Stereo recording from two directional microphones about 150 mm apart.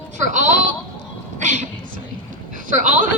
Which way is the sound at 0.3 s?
60° right (ahead or behind).